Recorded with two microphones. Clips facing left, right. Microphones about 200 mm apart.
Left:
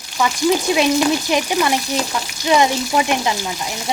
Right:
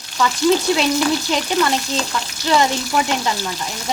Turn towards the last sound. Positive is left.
turn(degrees=15)  # may be behind; listen again after turning